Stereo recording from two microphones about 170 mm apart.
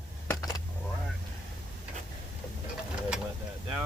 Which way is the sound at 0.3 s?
20° left (ahead or behind).